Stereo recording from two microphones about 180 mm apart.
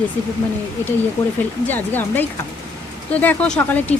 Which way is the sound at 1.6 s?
10° left (ahead or behind).